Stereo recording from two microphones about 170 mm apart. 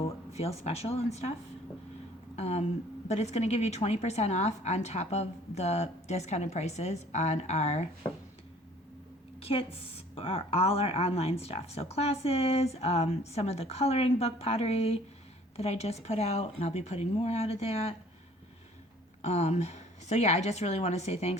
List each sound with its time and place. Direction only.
0.0 s speech: 35° left (ahead or behind)
10.2 s speech: 35° left (ahead or behind)
19.2 s speech: 40° left (ahead or behind)